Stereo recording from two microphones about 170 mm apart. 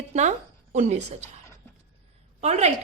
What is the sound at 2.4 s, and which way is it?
Speech, 40° right (ahead or behind).